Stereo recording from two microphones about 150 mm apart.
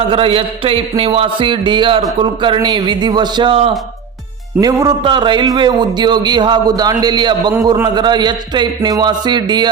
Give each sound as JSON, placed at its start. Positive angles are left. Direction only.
{"t": 0.1, "sound": "a man's voice", "side_deg": -35}
{"t": 7.5, "sound": "a man's voice", "side_deg": -20}